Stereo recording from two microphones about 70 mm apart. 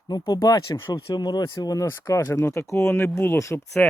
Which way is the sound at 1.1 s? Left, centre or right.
Left.